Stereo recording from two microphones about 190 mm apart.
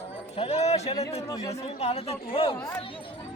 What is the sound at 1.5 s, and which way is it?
Speech, 35° left (ahead or behind).